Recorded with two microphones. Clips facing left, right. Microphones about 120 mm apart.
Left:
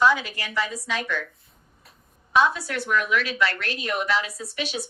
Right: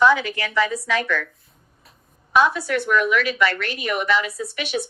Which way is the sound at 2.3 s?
60° right (ahead or behind).